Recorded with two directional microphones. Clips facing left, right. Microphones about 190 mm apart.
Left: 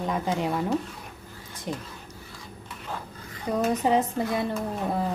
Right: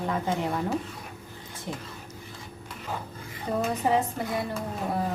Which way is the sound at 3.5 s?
15° left (ahead or behind).